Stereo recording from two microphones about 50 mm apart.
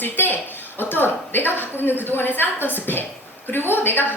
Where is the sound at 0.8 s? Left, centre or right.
Left.